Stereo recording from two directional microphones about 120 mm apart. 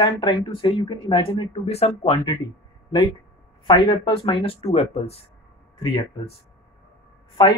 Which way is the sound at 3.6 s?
40° left (ahead or behind).